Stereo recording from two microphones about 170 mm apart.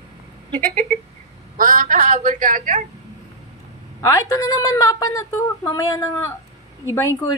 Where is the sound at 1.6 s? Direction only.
55° right (ahead or behind).